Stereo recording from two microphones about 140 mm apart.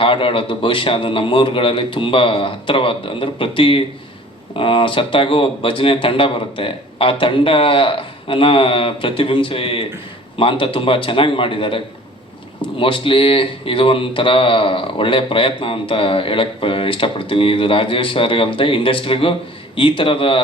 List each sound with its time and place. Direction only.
0.0 s speech: 40° left (ahead or behind)
12.8 s speech: 40° left (ahead or behind)